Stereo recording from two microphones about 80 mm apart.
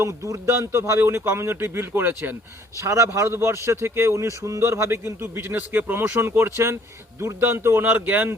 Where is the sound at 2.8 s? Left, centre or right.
Right.